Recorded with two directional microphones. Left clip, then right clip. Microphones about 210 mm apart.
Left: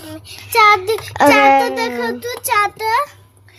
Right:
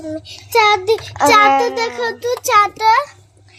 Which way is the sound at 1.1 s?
30° left (ahead or behind).